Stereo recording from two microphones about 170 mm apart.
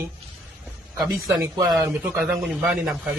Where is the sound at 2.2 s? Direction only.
Centre (ahead or behind).